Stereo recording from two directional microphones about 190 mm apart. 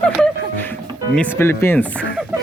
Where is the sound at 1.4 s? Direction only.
10° left (ahead or behind).